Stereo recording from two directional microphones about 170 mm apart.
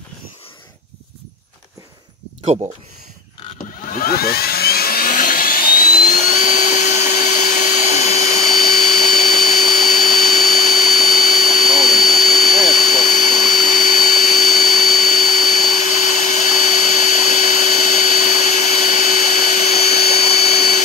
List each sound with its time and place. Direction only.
2.4 s speech: 35° right (ahead or behind)
3.8 s helicopter: 55° left (ahead or behind)
12.8 s vacuum cleaner: 50° left (ahead or behind)